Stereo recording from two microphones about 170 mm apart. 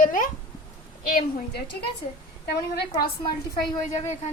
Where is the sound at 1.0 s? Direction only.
70° left (ahead or behind).